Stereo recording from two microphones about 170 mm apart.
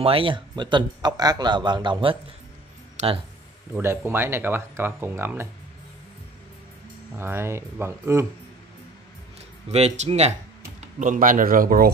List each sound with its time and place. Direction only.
0.0 s speech: 30° right (ahead or behind)
3.0 s speech: 45° right (ahead or behind)
3.7 s speech: 15° right (ahead or behind)
7.2 s speech: 15° right (ahead or behind)
9.7 s speech: 40° right (ahead or behind); by 11.9 s 60° right (ahead or behind)